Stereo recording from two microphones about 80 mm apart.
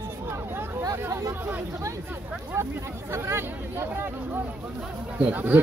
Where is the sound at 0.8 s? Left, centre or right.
Right.